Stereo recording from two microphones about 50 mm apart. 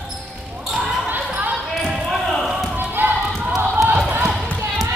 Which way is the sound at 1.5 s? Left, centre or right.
Centre.